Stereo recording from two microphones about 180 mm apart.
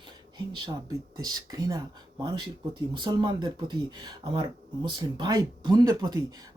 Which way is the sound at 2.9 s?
25° right (ahead or behind).